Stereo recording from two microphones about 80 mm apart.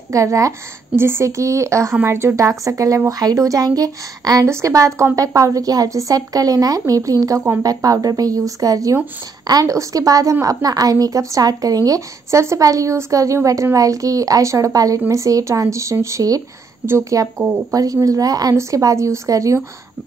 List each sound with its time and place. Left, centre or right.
0.1 s a woman's voice: right